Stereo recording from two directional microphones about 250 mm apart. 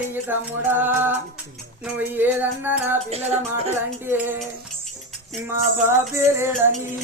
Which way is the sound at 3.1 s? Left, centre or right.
Right.